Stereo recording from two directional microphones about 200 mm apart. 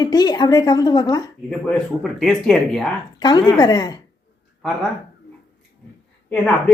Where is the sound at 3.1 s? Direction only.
20° left (ahead or behind).